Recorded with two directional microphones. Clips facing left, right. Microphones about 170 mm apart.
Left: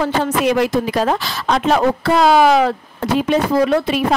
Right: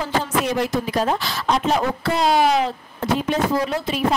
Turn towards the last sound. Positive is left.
turn(degrees=65)  # may be behind; listen again after turning